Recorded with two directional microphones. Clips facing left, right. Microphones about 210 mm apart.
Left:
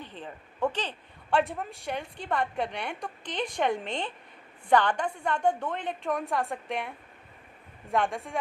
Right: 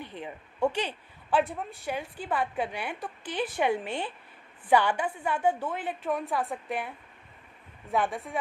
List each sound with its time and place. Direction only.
0.0 s speech: 10° right (ahead or behind)
1.4 s a woman's voice: centre (ahead or behind)